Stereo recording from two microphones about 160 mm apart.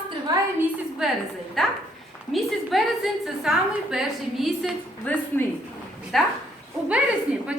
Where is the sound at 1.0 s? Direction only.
Centre (ahead or behind).